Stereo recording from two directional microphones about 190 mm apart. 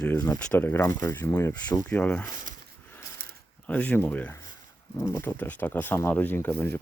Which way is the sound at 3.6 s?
5° left (ahead or behind).